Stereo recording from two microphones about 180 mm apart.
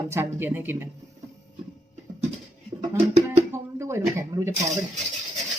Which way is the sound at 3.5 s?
15° right (ahead or behind).